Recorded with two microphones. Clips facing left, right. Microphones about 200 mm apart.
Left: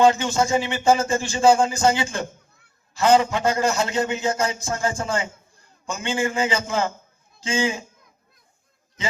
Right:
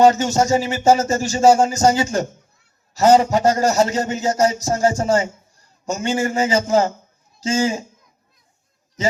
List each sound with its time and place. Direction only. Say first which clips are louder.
0.0 s a man's voice: right 4 dB; 40° right (ahead or behind)